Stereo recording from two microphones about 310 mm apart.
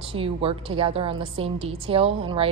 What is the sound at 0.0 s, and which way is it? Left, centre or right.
A woman's voice, centre.